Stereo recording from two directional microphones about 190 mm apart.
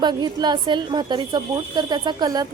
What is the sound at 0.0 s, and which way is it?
A woman's voice, 20° right (ahead or behind).